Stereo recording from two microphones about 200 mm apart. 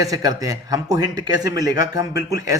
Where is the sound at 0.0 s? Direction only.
20° right (ahead or behind).